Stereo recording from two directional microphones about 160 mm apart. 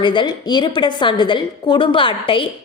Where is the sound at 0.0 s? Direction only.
30° left (ahead or behind).